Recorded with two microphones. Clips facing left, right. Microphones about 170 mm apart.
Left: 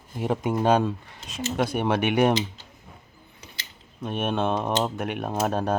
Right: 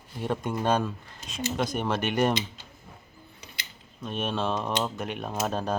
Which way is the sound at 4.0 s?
55° left (ahead or behind).